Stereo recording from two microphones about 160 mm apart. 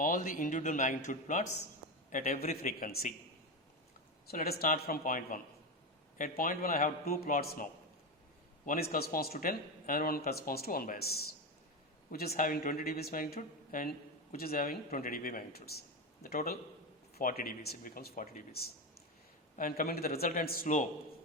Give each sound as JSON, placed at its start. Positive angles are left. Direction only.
{"t": 0.0, "sound": "speech", "side_deg": 55}
{"t": 4.3, "sound": "a man's voice", "side_deg": 75}